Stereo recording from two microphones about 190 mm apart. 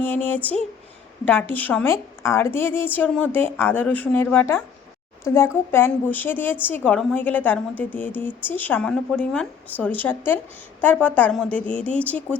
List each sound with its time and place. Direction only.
0.0 s a woman's voice: 10° left (ahead or behind)